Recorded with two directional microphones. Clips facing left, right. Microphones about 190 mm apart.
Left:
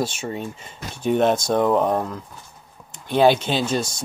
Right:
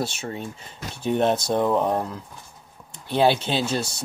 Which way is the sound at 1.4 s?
50° left (ahead or behind).